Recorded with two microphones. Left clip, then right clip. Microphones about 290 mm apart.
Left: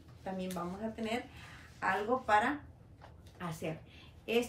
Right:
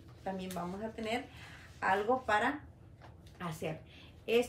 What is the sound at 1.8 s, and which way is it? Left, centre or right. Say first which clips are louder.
A woman's voice: right 2 dB; centre.